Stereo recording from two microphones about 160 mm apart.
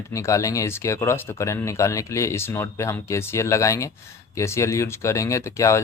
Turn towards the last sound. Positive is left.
turn(degrees=20)  # may be behind; listen again after turning